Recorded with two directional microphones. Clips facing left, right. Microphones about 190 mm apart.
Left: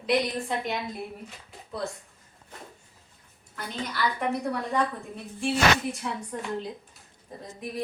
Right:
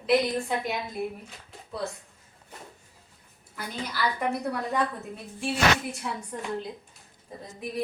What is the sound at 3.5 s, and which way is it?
A woman's voice, 5° right (ahead or behind).